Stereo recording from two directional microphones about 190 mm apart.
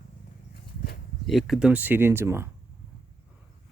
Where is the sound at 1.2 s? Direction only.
Centre (ahead or behind).